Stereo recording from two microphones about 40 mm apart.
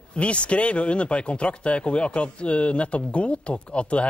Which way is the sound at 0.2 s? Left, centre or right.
Left.